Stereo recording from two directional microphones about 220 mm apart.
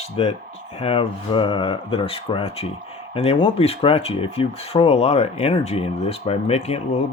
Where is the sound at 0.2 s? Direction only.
25° left (ahead or behind).